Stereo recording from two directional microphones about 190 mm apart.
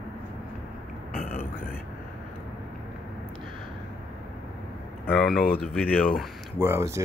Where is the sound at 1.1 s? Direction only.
50° left (ahead or behind).